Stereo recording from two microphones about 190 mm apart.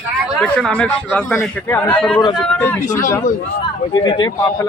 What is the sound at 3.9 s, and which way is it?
Speech, 25° left (ahead or behind).